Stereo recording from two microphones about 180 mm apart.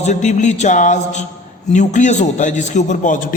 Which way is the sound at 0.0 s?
40° left (ahead or behind).